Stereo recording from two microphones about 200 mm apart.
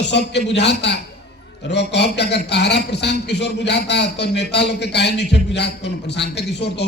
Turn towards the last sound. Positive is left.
turn(degrees=60)  # may be behind; listen again after turning